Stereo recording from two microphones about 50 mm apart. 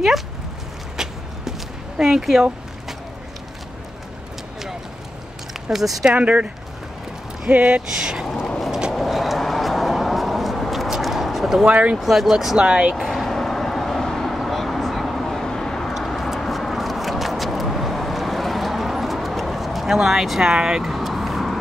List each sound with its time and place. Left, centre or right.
1.0 s a sound: centre
2.0 s speech: centre
5.5 s speech: centre
6.1 s speech: right
7.9 s speech: centre
8.9 s vehicle: centre
11.6 s speech: right
12.0 s speech: centre
12.6 s speech: right
12.9 s vehicle: centre